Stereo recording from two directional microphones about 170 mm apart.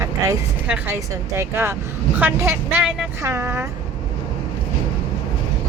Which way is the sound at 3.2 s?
15° right (ahead or behind).